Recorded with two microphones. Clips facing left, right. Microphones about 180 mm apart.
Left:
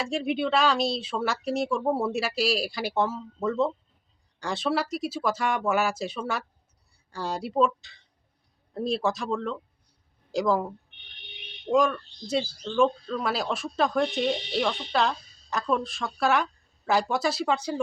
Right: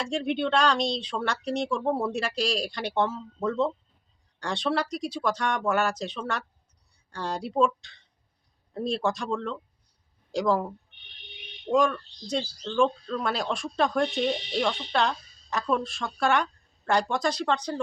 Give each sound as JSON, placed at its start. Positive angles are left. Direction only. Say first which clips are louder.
{"t": 0.0, "sound": "speech", "louder": "even", "side_deg": 5}
{"t": 11.7, "sound": "speech", "louder": "left 1 dB", "side_deg": 0}